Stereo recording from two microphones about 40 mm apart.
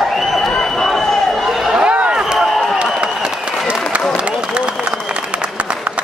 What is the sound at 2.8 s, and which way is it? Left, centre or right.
Applause, right.